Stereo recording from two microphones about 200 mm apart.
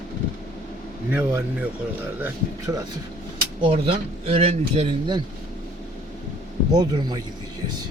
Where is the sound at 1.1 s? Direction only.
10° right (ahead or behind).